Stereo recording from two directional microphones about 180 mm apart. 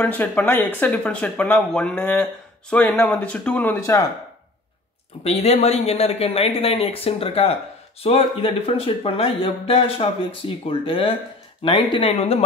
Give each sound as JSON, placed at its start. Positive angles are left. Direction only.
{"t": 0.0, "sound": "speech", "side_deg": 10}
{"t": 5.2, "sound": "speech", "side_deg": 35}